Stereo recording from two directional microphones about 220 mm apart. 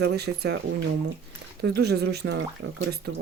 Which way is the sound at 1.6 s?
50° right (ahead or behind).